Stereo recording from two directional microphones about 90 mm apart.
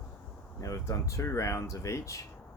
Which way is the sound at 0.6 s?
35° left (ahead or behind).